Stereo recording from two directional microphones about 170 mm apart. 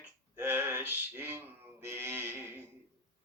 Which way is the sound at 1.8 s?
10° right (ahead or behind).